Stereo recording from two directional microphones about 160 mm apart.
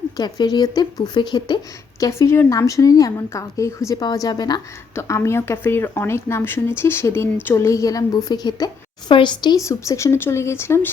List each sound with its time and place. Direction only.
0.2 s a woman's voice: 25° left (ahead or behind)